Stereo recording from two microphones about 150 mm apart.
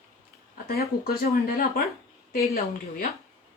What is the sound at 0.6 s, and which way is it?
Speech, 90° left.